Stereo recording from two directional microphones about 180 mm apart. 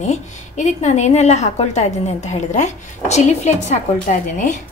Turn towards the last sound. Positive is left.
turn(degrees=45)  # may be behind; listen again after turning